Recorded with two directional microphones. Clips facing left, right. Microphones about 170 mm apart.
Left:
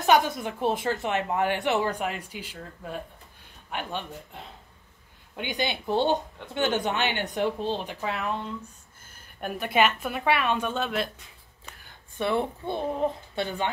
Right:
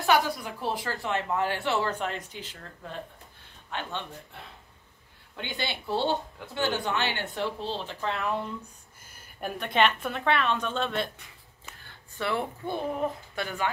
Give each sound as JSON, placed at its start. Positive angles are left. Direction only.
{"t": 0.0, "sound": "a woman's voice", "side_deg": 20}
{"t": 9.4, "sound": "speech", "side_deg": 5}
{"t": 12.2, "sound": "a woman's voice", "side_deg": 20}